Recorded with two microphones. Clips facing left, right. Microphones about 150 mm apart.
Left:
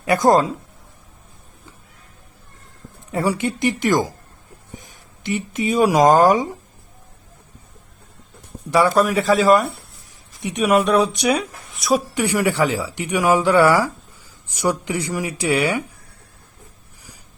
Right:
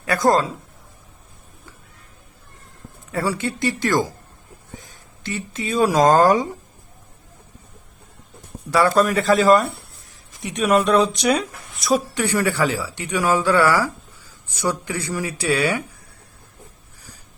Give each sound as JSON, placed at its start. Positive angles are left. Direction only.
{"t": 0.0, "sound": "speech", "side_deg": 20}
{"t": 3.1, "sound": "speech", "side_deg": 20}
{"t": 8.7, "sound": "speech", "side_deg": 15}